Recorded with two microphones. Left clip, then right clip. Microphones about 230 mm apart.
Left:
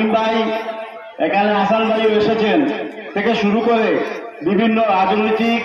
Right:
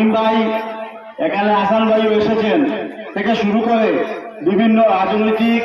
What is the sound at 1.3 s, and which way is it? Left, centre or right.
A man's voice, left.